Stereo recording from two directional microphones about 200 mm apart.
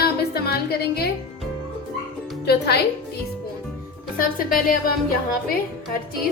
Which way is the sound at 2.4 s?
55° left (ahead or behind).